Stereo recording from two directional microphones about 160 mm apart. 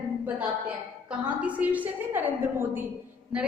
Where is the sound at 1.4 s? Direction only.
10° right (ahead or behind).